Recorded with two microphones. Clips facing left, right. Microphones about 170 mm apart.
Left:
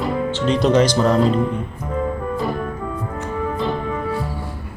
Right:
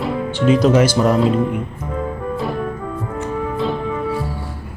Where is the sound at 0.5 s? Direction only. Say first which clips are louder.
Even; 5° right (ahead or behind).